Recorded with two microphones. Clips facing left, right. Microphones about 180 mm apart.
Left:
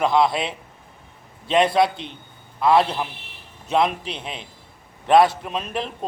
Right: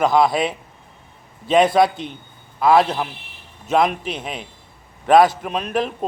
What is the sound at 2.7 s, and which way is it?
Speech, 45° right (ahead or behind).